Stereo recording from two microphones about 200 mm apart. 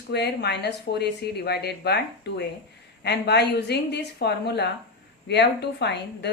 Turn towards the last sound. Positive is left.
turn(degrees=55)  # may be behind; listen again after turning